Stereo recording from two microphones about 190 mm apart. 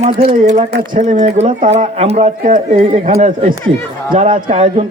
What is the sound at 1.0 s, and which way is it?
A man's voice, 40° right (ahead or behind).